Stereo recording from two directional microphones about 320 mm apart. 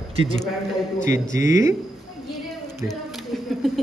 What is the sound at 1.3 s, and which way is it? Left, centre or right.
Speech, centre.